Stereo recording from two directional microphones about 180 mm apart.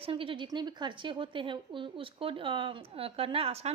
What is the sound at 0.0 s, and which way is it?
A woman's voice, 30° right (ahead or behind).